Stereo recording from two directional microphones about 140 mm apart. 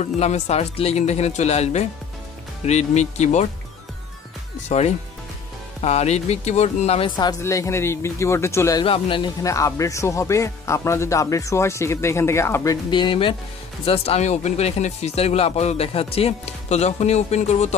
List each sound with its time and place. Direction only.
0.0 s speech: 50° left (ahead or behind)
4.6 s speech: 50° left (ahead or behind)
7.1 s speech: 30° left (ahead or behind)
7.4 s speech: 20° left (ahead or behind)
8.8 s speech: 40° left (ahead or behind)
9.4 s speech: 25° left (ahead or behind)
12.9 s speech: 35° left (ahead or behind)